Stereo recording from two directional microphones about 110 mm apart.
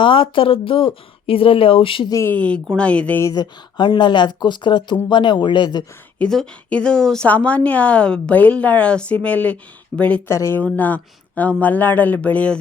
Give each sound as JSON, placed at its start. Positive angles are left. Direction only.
{"t": 0.0, "sound": "speech", "side_deg": 50}
{"t": 2.2, "sound": "a woman's voice", "side_deg": 15}
{"t": 3.3, "sound": "speech", "side_deg": 40}
{"t": 6.1, "sound": "a woman's voice", "side_deg": 10}
{"t": 10.2, "sound": "speech", "side_deg": 25}
{"t": 10.6, "sound": "a woman's voice", "side_deg": 15}